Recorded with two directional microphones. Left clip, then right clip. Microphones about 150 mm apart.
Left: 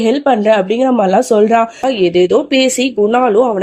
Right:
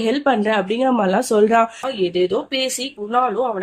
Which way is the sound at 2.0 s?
45° left (ahead or behind).